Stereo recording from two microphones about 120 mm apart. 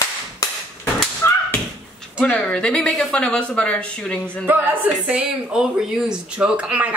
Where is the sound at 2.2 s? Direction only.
10° left (ahead or behind).